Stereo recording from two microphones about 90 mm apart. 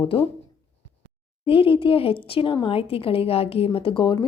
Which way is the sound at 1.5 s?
85° left.